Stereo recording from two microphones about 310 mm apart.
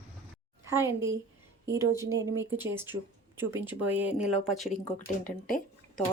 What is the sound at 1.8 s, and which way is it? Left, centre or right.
Speech, centre.